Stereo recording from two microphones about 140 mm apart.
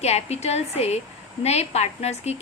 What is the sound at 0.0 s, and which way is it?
A woman's voice, 50° left (ahead or behind).